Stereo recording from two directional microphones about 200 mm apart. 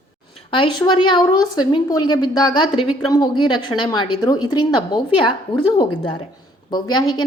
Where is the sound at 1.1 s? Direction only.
20° left (ahead or behind).